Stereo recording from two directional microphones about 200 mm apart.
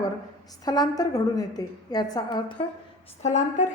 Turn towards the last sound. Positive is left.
turn(degrees=35)  # may be behind; listen again after turning